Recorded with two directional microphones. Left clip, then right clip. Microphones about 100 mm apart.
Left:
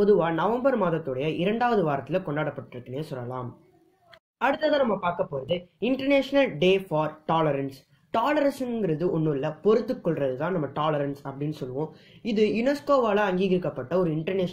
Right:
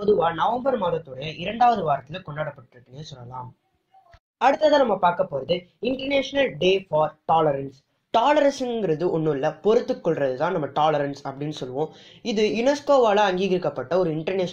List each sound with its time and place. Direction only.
0.2 s speech: 20° right (ahead or behind)
4.4 s speech: 25° right (ahead or behind)